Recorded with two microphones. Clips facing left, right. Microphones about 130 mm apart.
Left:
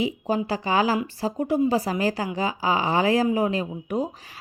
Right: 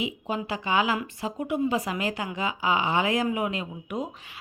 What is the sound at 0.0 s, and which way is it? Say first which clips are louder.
A woman's voice: left 6 dB; 35° left (ahead or behind).